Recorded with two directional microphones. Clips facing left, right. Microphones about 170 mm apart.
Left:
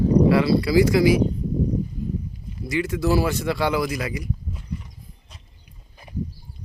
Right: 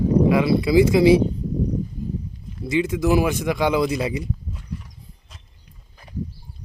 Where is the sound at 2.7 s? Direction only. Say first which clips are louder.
Right 2 dB; 20° right (ahead or behind).